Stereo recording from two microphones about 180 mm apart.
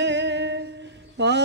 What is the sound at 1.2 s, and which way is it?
Mantra, 70° right (ahead or behind).